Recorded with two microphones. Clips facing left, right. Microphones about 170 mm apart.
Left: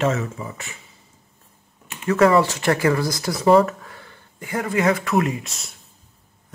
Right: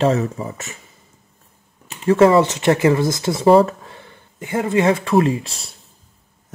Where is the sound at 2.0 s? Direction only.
25° right (ahead or behind).